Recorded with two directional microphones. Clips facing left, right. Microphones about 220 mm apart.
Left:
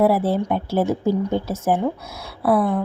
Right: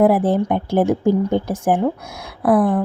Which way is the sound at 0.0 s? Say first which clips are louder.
Right 3 dB; 15° right (ahead or behind).